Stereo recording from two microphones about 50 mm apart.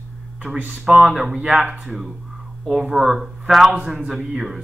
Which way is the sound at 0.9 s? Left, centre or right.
Centre.